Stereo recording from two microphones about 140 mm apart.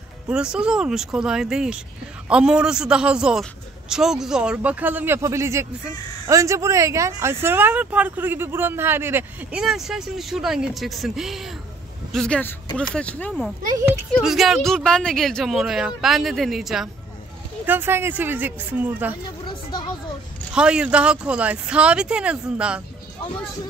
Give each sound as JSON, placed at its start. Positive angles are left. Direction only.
{"t": 0.3, "sound": "speech", "side_deg": -5}
{"t": 9.6, "sound": "speech", "side_deg": -5}
{"t": 17.6, "sound": "speech", "side_deg": -15}
{"t": 19.4, "sound": "a sound", "side_deg": 30}
{"t": 20.5, "sound": "speech", "side_deg": -5}